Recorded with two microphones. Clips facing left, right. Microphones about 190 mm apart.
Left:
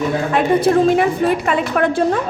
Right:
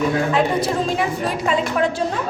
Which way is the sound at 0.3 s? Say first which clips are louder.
Left 5 dB; 60° left (ahead or behind).